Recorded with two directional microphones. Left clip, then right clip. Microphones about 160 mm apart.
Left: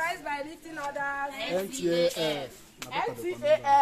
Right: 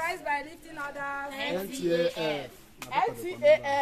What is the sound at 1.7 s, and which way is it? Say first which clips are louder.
Speech: even; 35° left (ahead or behind).